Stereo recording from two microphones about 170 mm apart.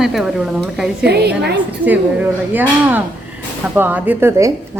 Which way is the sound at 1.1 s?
70° right (ahead or behind).